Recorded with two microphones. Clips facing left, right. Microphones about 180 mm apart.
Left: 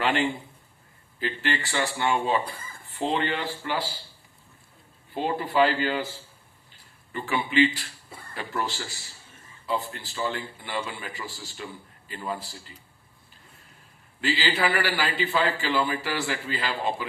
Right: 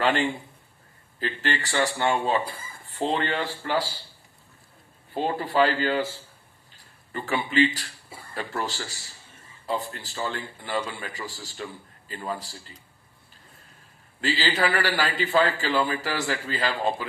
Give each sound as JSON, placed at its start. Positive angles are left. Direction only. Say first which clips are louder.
{"t": 0.0, "sound": "a man's voice", "louder": "right 1 dB", "side_deg": -40}
{"t": 5.2, "sound": "a man's voice", "louder": "even", "side_deg": -40}
{"t": 7.1, "sound": "a man's voice", "louder": "even", "side_deg": -40}
{"t": 14.2, "sound": "a man's voice", "louder": "right 1 dB", "side_deg": -40}